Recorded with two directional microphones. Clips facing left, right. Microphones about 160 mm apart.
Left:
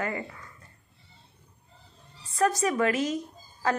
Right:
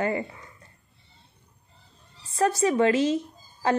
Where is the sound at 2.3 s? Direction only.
30° right (ahead or behind).